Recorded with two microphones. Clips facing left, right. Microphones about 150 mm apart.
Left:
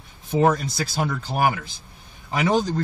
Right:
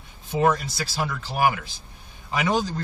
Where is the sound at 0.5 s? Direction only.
45° left (ahead or behind).